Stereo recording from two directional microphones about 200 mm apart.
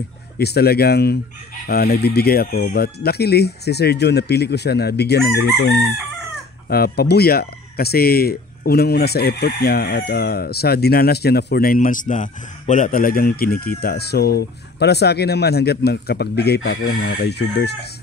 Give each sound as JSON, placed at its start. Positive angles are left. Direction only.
{"t": 0.4, "sound": "speech", "side_deg": 50}